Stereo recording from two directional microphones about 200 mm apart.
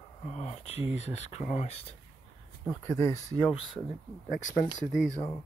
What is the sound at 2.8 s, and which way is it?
Speech, 15° left (ahead or behind).